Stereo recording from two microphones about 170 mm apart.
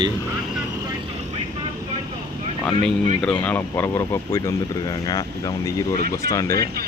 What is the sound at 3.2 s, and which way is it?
Speech, 5° left (ahead or behind).